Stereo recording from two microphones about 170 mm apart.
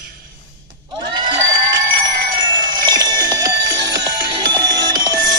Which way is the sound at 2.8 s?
25° right (ahead or behind).